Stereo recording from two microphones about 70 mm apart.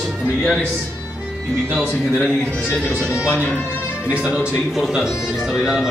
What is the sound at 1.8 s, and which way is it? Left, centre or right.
Speech, centre.